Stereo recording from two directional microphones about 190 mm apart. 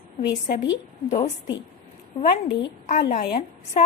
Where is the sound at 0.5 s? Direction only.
65° left (ahead or behind).